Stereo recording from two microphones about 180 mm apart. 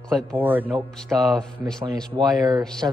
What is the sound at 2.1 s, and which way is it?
Speech, 20° right (ahead or behind).